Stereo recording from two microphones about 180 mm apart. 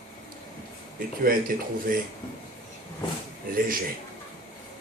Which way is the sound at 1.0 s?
50° right (ahead or behind).